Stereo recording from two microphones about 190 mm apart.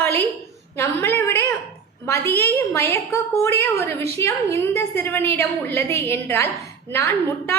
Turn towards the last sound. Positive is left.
turn(degrees=10)  # may be behind; listen again after turning